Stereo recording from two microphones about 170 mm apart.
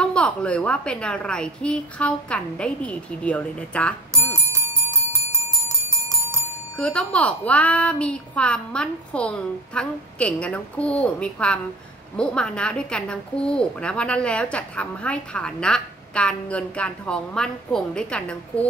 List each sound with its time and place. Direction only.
0.0 s a woman's voice: 5° left (ahead or behind)
6.1 s bell: 15° right (ahead or behind)
6.8 s a woman's voice: 5° left (ahead or behind)